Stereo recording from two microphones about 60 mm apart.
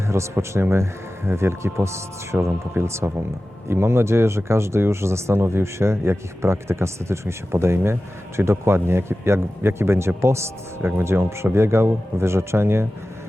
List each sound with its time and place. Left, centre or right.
0.1 s speech: right